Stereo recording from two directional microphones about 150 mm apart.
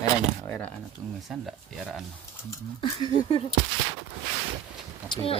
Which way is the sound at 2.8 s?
30° left (ahead or behind).